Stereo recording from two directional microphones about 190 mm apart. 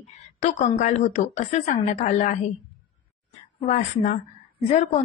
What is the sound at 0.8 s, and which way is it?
A woman's voice, 40° left (ahead or behind).